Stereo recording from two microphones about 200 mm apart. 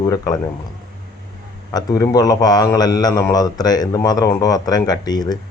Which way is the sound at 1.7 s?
15° left (ahead or behind).